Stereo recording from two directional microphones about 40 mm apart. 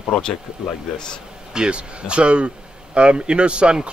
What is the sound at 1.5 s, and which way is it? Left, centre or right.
Speech, right.